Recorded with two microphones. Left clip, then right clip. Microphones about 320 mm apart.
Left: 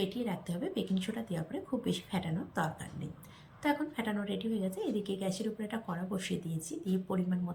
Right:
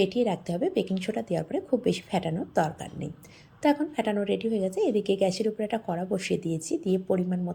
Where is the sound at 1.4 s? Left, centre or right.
Right.